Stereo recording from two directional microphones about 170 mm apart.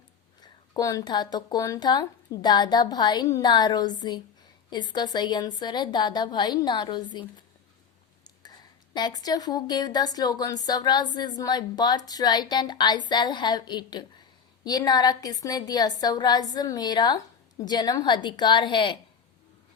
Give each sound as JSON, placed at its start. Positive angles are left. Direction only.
{"t": 0.4, "sound": "speech", "side_deg": 25}